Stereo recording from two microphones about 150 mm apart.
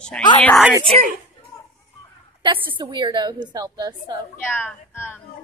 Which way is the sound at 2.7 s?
30° right (ahead or behind).